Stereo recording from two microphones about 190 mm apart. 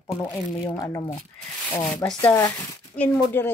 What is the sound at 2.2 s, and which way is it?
Speech, 15° left (ahead or behind).